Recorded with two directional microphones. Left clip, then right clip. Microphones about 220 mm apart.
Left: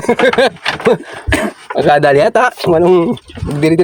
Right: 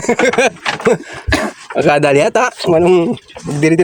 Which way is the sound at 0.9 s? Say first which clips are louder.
Left 1 dB; centre (ahead or behind).